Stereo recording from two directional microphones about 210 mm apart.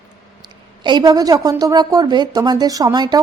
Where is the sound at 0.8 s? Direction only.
20° right (ahead or behind).